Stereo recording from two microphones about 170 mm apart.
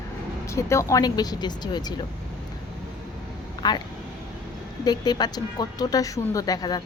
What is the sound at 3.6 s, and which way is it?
Speech, 25° left (ahead or behind).